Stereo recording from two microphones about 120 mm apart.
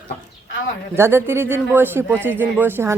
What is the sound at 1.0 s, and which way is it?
Speech, 20° right (ahead or behind).